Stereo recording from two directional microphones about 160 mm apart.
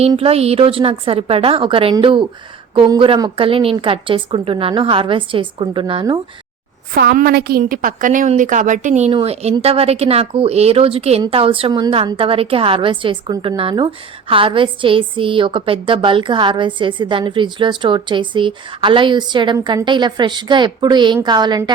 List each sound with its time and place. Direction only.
0.2 s a woman's voice: 40° right (ahead or behind)
6.9 s a woman's voice: 70° right (ahead or behind); by 21.6 s 25° right (ahead or behind)